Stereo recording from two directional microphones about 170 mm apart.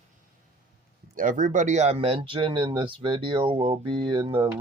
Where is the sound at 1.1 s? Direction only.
50° right (ahead or behind).